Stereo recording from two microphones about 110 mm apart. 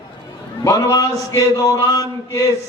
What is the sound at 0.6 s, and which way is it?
A man's voice, 30° left (ahead or behind).